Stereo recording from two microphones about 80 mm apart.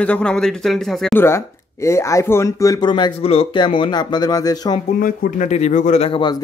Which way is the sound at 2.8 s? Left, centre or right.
Left.